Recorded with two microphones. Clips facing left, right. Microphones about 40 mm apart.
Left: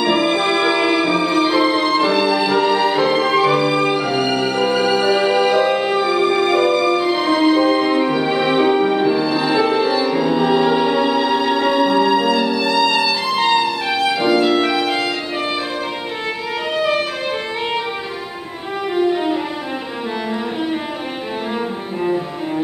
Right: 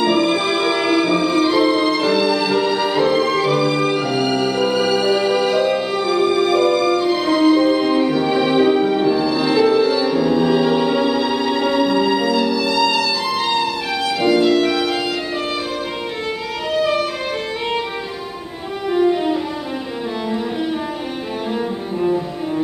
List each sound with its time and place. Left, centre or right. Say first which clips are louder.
0.0 s music: even; centre
16.7 s music: right 1 dB; centre
18.9 s music: right 1 dB; centre